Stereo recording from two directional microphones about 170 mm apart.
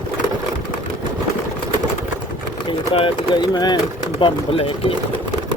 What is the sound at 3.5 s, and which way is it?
Speech, 25° left (ahead or behind).